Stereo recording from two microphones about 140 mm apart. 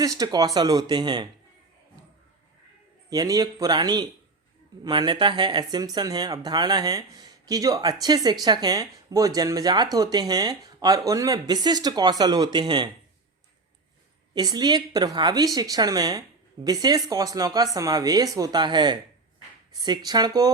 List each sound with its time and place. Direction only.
0.0 s speech: 25° right (ahead or behind)
3.1 s speech: 25° right (ahead or behind)
14.3 s speech: 30° right (ahead or behind)